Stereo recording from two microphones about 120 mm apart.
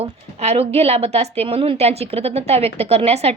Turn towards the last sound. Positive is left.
turn(degrees=-60)  # may be behind; listen again after turning